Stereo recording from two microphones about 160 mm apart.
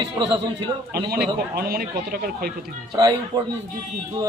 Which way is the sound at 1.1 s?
70° right (ahead or behind).